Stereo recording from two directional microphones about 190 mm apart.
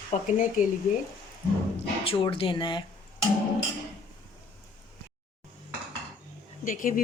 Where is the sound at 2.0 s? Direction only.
30° left (ahead or behind).